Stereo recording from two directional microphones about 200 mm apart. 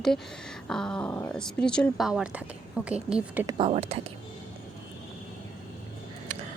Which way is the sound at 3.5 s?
25° right (ahead or behind).